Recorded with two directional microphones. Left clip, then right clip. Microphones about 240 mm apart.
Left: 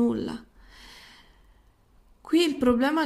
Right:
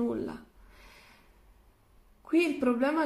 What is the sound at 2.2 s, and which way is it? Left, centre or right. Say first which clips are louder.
Speech: left 4 dB; left.